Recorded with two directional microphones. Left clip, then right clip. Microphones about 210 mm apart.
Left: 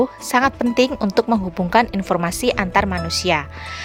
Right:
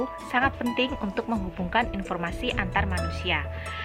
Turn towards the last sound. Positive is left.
turn(degrees=60)  # may be behind; listen again after turning